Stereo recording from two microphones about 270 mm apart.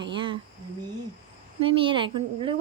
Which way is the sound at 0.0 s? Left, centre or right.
Centre.